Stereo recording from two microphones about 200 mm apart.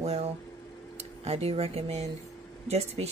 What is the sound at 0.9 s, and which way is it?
Speech, 30° right (ahead or behind).